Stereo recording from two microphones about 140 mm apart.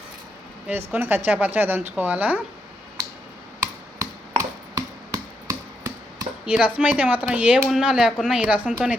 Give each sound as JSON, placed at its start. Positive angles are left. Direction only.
{"t": 0.7, "sound": "speech", "side_deg": -15}
{"t": 3.6, "sound": "a sound", "side_deg": -20}
{"t": 6.4, "sound": "speech", "side_deg": -5}